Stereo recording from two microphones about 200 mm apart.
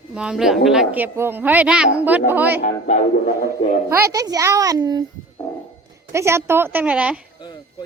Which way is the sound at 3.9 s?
15° right (ahead or behind).